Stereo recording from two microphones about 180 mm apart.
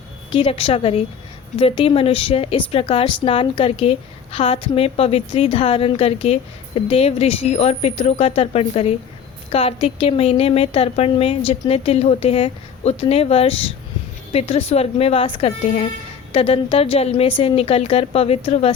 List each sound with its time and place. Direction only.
0.3 s a woman's voice: 30° left (ahead or behind)